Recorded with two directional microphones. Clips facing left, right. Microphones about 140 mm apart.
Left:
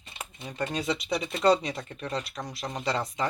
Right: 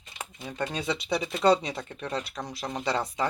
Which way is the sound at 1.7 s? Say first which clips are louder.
Even; centre (ahead or behind).